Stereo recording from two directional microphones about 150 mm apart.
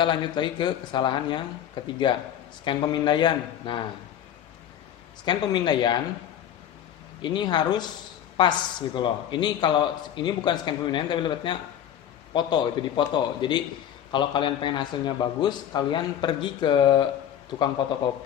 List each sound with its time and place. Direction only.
0.0 s a man's voice: 30° left (ahead or behind)
5.2 s speech: 30° left (ahead or behind)
7.2 s a man's voice: 30° left (ahead or behind)